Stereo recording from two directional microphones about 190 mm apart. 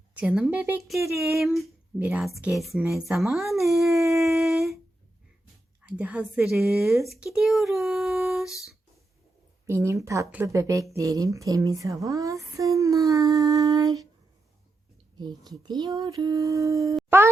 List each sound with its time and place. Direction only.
0.2 s speech: 5° right (ahead or behind)
0.9 s speech: 15° right (ahead or behind)
1.4 s speech: centre (ahead or behind)
5.8 s speech: 5° right (ahead or behind)
9.6 s speech: 15° right (ahead or behind)
15.2 s speech: 20° right (ahead or behind)